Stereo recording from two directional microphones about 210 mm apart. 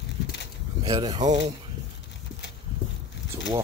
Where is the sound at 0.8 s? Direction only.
20° right (ahead or behind).